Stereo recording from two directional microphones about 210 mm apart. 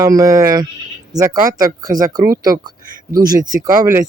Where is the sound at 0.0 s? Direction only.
15° right (ahead or behind).